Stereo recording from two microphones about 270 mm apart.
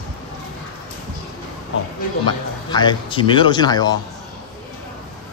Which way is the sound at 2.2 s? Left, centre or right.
Centre.